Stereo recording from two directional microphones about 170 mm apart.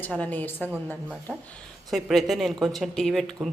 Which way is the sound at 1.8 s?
Centre (ahead or behind).